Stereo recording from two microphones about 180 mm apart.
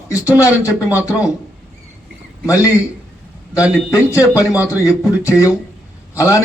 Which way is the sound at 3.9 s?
15° left (ahead or behind).